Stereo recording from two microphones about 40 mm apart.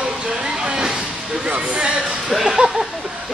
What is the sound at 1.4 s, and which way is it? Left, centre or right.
Speech, right.